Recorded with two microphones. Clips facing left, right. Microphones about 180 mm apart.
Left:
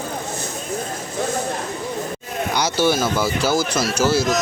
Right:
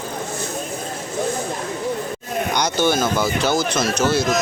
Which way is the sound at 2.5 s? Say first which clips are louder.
Left 1 dB; 5° left (ahead or behind).